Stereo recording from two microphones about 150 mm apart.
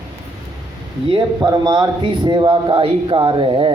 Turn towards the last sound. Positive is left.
turn(degrees=-35)  # may be behind; listen again after turning